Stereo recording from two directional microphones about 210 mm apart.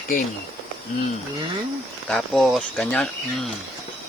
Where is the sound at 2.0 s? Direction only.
Centre (ahead or behind).